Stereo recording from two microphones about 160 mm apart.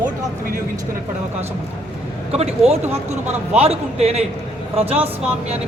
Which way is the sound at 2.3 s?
40° right (ahead or behind).